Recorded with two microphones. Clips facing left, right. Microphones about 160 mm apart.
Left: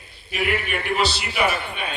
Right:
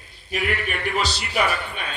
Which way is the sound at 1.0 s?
40° right (ahead or behind).